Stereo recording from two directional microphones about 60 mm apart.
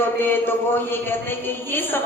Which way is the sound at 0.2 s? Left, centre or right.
Left.